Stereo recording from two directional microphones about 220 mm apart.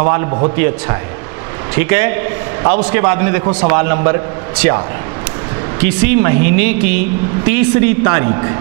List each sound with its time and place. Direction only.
0.1 s a man's voice: 25° right (ahead or behind)
1.8 s speech: 15° right (ahead or behind)